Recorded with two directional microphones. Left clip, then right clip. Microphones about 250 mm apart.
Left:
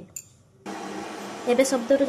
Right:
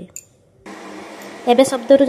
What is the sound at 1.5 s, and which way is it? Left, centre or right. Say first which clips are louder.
Speech: right 8 dB; centre.